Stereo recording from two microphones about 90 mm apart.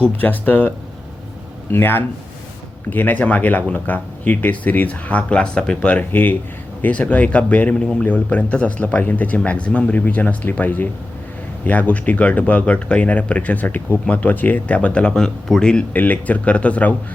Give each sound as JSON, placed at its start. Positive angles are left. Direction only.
{"t": 0.0, "sound": "speech", "side_deg": 20}
{"t": 1.7, "sound": "speech", "side_deg": 25}